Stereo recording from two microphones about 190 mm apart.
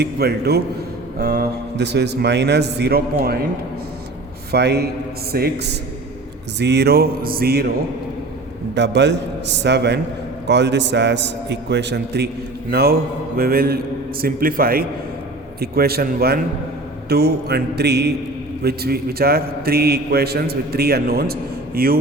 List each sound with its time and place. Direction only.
0.0 s a man's voice: 60° right (ahead or behind)
4.5 s a man's voice: 60° right (ahead or behind)
8.7 s a man's voice: 65° right (ahead or behind)